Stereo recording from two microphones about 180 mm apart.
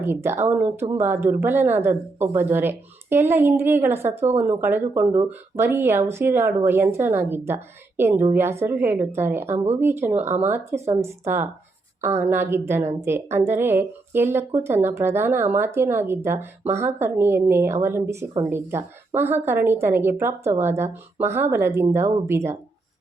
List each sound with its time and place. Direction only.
0.0 s speech: 10° right (ahead or behind)
10.2 s speech: 40° right (ahead or behind)
10.4 s speech: 10° right (ahead or behind)